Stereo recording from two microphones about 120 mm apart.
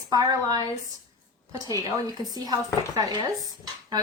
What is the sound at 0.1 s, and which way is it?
Speech, 30° right (ahead or behind).